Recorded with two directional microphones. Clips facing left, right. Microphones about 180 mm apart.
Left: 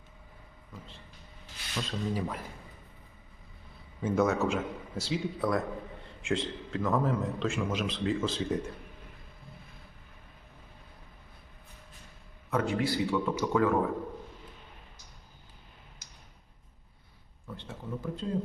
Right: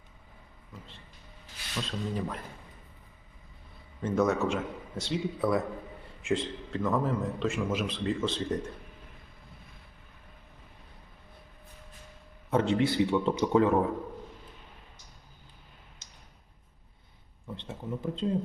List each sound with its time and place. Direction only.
1.7 s a man's voice: 5° left (ahead or behind)
4.0 s a man's voice: 5° left (ahead or behind)
12.5 s a man's voice: 25° right (ahead or behind)
16.0 s tick-tock: 25° right (ahead or behind)
17.5 s a man's voice: 20° right (ahead or behind)